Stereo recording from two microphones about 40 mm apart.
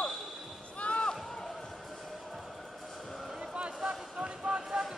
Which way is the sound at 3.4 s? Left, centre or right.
Right.